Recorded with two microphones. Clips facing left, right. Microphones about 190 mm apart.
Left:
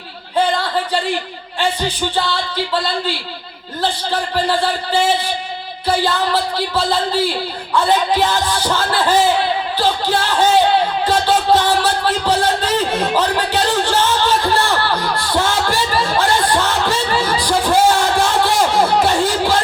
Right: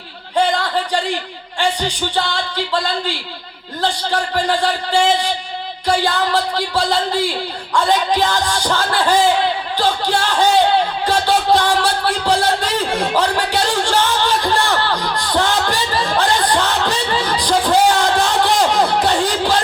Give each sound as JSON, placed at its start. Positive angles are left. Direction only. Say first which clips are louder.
{"t": 1.5, "sound": "speech", "louder": "even", "side_deg": -15}
{"t": 4.1, "sound": "speech", "louder": "left 1 dB", "side_deg": -15}
{"t": 8.4, "sound": "speech", "louder": "left 1 dB", "side_deg": -15}
{"t": 11.0, "sound": "music", "louder": "left 1 dB", "side_deg": -15}
{"t": 16.2, "sound": "a sound", "louder": "even", "side_deg": -15}